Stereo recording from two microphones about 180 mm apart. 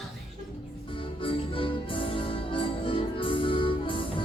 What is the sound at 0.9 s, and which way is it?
Music, 30° left (ahead or behind).